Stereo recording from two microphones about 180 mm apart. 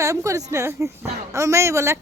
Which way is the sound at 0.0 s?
15° right (ahead or behind).